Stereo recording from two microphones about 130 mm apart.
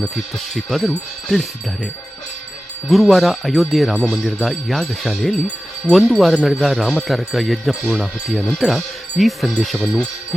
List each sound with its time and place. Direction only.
0.0 s speech: centre (ahead or behind)